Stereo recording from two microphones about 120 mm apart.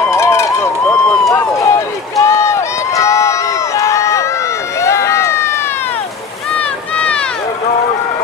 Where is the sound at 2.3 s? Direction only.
25° left (ahead or behind).